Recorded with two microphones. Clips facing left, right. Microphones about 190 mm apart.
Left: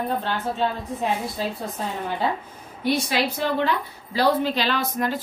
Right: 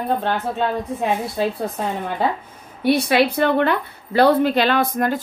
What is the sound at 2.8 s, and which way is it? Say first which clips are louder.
A woman's voice: right 6 dB; 60° right (ahead or behind).